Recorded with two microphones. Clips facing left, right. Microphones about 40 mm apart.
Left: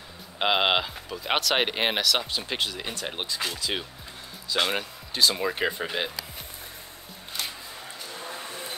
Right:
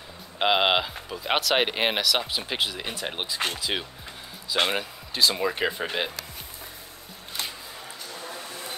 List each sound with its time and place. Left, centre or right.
0.4 s speech: centre
4.7 s speech: centre
8.2 s a sound: centre